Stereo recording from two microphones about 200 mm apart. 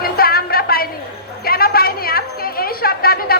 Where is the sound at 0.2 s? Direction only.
50° left (ahead or behind).